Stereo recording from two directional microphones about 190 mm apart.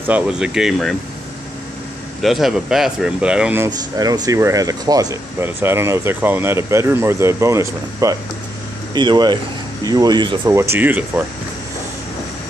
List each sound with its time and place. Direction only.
0.0 s speech: 5° right (ahead or behind)
2.2 s speech: centre (ahead or behind); by 10.4 s 25° right (ahead or behind)
10.4 s speech: 15° right (ahead or behind)